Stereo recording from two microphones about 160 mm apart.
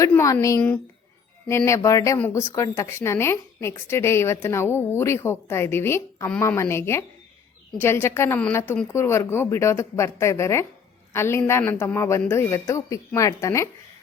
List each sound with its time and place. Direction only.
0.0 s a woman's voice: 20° left (ahead or behind)